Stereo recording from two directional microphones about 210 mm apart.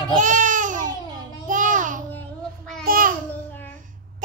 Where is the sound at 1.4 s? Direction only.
40° right (ahead or behind).